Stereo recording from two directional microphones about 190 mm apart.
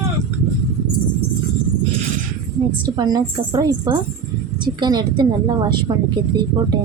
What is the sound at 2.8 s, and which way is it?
Speech, 20° right (ahead or behind).